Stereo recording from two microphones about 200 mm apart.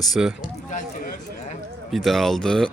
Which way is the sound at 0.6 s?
40° left (ahead or behind).